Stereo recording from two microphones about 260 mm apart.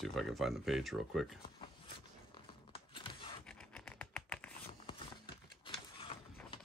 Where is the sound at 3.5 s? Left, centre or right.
Centre.